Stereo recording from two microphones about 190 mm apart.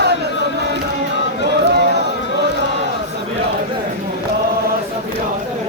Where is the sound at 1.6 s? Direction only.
60° right (ahead or behind).